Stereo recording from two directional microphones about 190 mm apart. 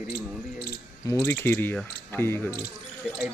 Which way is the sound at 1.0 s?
15° left (ahead or behind).